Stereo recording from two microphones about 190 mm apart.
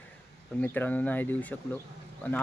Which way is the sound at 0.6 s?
10° left (ahead or behind).